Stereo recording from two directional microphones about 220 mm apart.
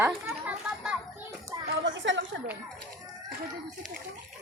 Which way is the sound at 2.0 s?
55° right (ahead or behind).